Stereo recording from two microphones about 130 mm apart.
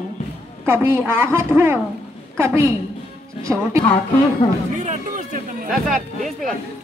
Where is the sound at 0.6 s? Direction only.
20° right (ahead or behind).